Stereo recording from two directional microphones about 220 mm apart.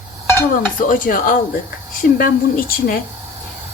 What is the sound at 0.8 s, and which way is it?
Speech, 40° left (ahead or behind).